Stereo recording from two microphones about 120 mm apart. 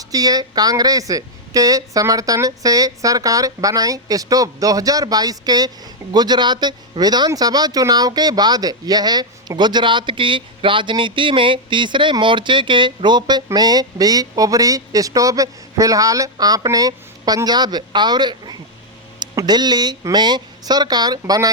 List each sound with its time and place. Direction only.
0.0 s speech: 30° right (ahead or behind)